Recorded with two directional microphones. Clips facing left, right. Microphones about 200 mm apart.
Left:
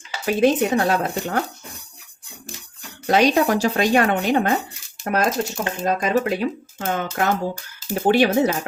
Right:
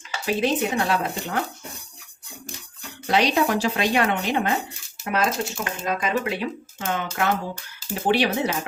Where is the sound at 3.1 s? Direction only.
45° left (ahead or behind).